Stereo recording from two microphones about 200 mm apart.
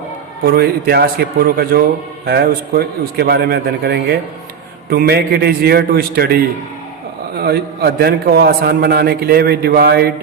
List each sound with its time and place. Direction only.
0.4 s a man's voice: 50° right (ahead or behind)